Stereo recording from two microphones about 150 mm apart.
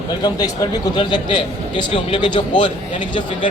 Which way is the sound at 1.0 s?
30° left (ahead or behind).